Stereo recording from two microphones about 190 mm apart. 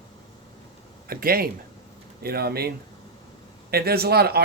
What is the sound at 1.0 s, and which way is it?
Speech, 50° right (ahead or behind).